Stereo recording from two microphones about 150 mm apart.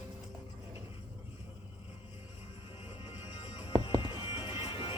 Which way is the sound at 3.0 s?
45° left (ahead or behind).